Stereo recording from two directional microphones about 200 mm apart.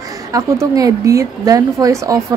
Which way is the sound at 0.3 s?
15° right (ahead or behind).